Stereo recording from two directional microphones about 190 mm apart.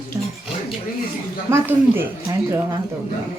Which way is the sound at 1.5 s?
10° right (ahead or behind).